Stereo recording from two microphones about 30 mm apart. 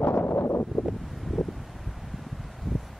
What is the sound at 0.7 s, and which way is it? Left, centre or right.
Wind, centre.